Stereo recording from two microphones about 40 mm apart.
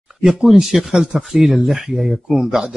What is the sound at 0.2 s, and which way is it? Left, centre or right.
Speech, centre.